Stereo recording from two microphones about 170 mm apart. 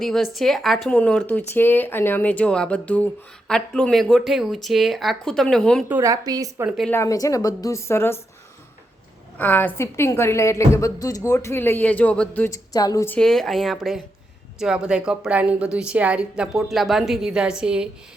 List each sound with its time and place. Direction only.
0.0 s speech: centre (ahead or behind)
5.9 s a woman's voice: 20° right (ahead or behind)
6.7 s speech: centre (ahead or behind)
6.9 s a woman's voice: 20° left (ahead or behind)
9.4 s a woman's voice: 10° left (ahead or behind)
13.1 s speech: 5° left (ahead or behind)